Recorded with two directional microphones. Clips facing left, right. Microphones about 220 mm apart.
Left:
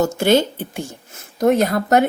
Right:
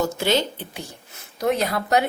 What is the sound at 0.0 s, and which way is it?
Speech, 50° left (ahead or behind).